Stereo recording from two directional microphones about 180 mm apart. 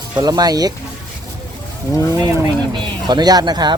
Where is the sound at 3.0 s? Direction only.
20° right (ahead or behind).